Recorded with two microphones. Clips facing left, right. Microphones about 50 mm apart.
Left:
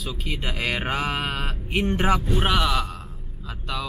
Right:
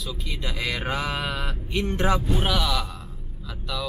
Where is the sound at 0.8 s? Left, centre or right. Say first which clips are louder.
Left 2 dB; left.